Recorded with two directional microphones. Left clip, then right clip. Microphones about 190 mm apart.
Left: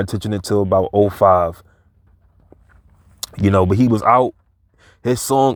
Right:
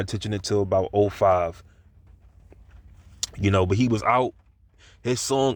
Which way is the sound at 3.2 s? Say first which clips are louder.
Left 7 dB; 45° left (ahead or behind).